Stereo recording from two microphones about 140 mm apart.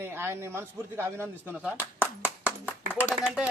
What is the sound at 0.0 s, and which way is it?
A man's voice, 15° right (ahead or behind).